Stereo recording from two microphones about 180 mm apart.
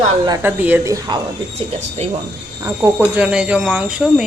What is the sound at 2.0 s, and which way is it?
Speech, 40° right (ahead or behind).